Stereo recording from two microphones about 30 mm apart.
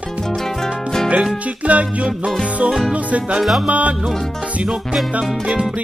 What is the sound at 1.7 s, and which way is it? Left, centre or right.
Music, right.